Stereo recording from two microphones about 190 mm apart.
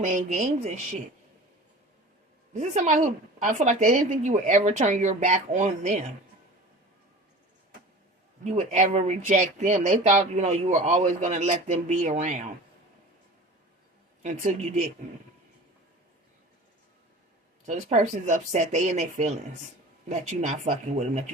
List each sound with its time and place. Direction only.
0.0 s speech: 40° right (ahead or behind)
2.5 s speech: 40° right (ahead or behind)
8.4 s speech: 40° right (ahead or behind)
14.2 s speech: 40° right (ahead or behind)
17.7 s speech: 40° right (ahead or behind)